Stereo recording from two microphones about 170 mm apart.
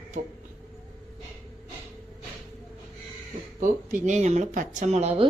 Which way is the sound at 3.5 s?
50° right (ahead or behind).